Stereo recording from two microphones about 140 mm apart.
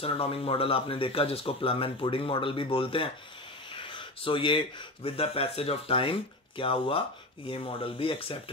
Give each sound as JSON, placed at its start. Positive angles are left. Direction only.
{"t": 0.0, "sound": "speech", "side_deg": 40}